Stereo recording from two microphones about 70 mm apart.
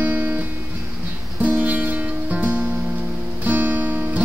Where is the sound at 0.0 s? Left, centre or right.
Right.